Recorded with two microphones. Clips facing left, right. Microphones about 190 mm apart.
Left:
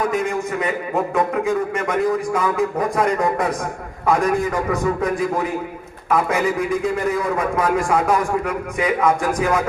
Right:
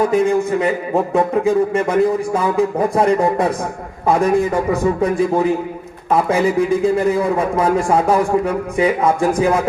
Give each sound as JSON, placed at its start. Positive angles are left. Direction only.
{"t": 0.0, "sound": "a man's voice", "side_deg": -30}